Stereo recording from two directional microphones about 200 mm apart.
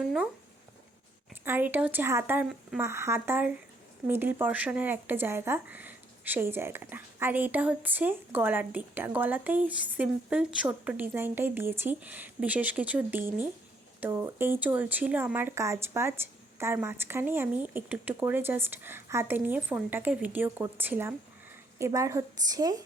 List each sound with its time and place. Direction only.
1.5 s speech: 10° right (ahead or behind)